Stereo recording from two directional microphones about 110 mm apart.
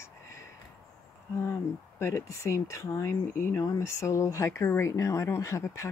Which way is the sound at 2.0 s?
25° left (ahead or behind).